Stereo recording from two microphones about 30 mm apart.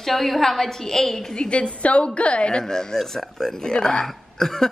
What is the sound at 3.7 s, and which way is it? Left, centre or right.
A woman's voice, left.